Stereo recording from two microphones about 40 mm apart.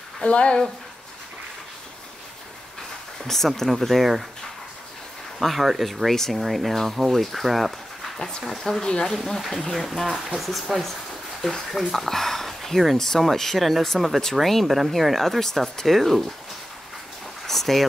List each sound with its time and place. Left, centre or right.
0.2 s speech: left
3.3 s speech: centre
5.4 s speech: centre
8.5 s speech: centre
17.5 s speech: centre